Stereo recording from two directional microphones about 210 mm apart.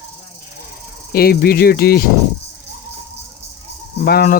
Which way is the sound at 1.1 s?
45° left (ahead or behind).